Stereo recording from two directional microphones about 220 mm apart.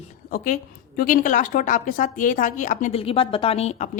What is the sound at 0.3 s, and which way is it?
A woman's voice, 40° left (ahead or behind).